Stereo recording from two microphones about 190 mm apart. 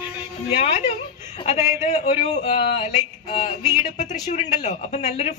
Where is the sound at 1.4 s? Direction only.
35° left (ahead or behind).